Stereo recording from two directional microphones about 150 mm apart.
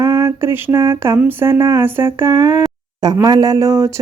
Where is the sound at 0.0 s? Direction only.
20° right (ahead or behind).